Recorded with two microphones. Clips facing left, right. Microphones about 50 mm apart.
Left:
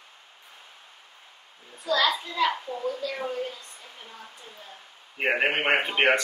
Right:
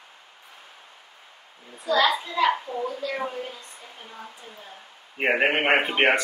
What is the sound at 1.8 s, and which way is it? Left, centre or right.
A child's voice, right.